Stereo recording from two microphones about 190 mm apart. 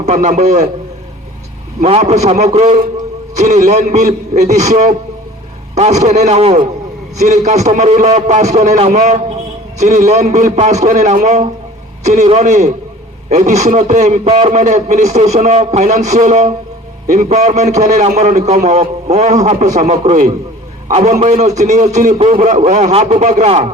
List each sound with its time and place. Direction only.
0.0 s a man's voice: 40° right (ahead or behind)
1.8 s a man's voice: 35° right (ahead or behind)